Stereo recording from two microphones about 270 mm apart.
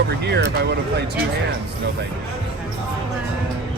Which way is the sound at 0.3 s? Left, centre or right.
Right.